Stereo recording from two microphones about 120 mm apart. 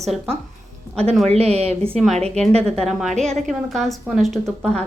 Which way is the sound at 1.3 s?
60° right (ahead or behind).